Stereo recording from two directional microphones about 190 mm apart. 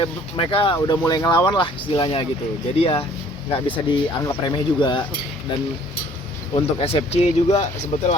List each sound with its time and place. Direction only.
0.0 s speech: 30° left (ahead or behind)
6.5 s speech: 30° left (ahead or behind)